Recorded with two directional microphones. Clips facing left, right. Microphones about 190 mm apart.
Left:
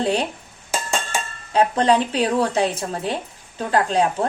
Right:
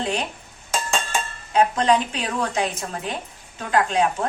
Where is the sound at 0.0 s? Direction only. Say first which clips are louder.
Left 5 dB; 35° left (ahead or behind).